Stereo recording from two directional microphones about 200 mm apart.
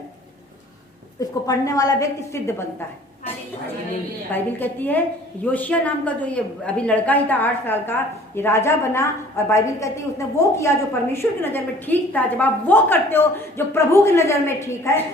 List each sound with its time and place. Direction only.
1.2 s a woman's voice: 15° left (ahead or behind)
4.3 s a woman's voice: 10° left (ahead or behind)